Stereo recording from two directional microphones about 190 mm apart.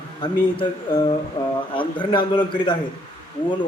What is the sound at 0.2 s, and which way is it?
Speech, 25° left (ahead or behind).